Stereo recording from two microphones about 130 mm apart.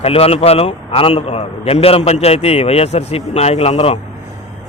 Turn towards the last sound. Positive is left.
turn(degrees=50)  # may be behind; listen again after turning